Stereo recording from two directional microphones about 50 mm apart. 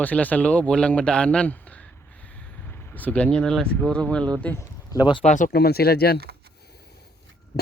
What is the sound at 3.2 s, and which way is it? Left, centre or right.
Speech, centre.